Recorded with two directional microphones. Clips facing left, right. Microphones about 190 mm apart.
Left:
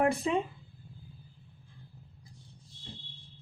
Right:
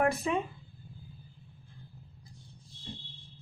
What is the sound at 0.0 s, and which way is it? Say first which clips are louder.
Speech: left 1 dB; 25° left (ahead or behind).